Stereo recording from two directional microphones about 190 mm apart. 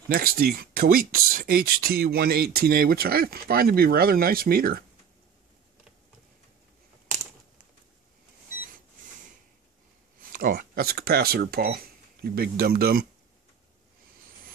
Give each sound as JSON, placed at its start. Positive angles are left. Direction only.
{"t": 0.1, "sound": "speech", "side_deg": -50}
{"t": 10.3, "sound": "speech", "side_deg": -45}